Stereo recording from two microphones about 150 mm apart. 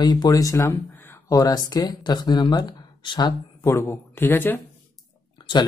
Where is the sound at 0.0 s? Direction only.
25° left (ahead or behind).